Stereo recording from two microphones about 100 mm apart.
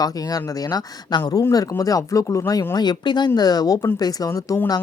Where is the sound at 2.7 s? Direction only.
45° left (ahead or behind).